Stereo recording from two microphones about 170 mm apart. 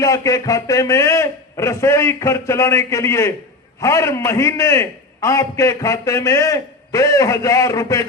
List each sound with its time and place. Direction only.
0.0 s a man's voice: 20° left (ahead or behind)